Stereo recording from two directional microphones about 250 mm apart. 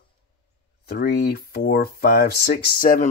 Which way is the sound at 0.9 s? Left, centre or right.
Left.